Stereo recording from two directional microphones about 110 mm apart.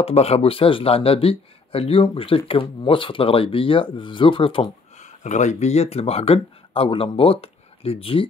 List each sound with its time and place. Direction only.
0.0 s speech: 70° left (ahead or behind)
5.0 s speech: 90° left; by 8.3 s 55° left (ahead or behind)